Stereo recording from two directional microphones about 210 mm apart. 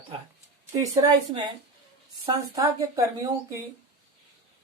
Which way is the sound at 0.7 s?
15° right (ahead or behind).